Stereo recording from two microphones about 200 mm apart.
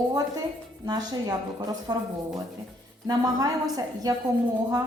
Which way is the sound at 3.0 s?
20° right (ahead or behind).